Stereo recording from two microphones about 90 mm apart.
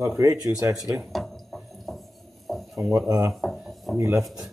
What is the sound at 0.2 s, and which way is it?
Speech, 40° right (ahead or behind).